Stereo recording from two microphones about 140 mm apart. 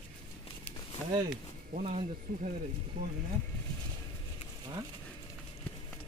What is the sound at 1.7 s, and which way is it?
Speech, 55° right (ahead or behind).